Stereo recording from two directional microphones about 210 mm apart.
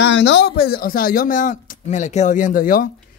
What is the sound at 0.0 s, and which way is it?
Speech, 55° left (ahead or behind).